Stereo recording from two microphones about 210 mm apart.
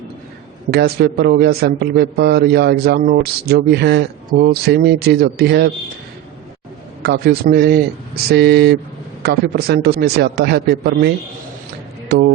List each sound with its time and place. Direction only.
0.7 s a man's voice: 50° right (ahead or behind)
7.0 s a man's voice: 50° right (ahead or behind)
12.1 s a man's voice: 50° right (ahead or behind)